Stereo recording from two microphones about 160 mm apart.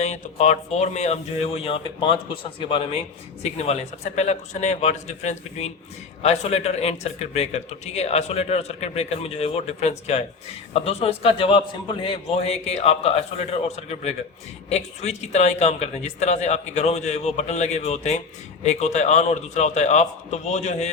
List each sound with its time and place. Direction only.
0.0 s speech: 45° left (ahead or behind)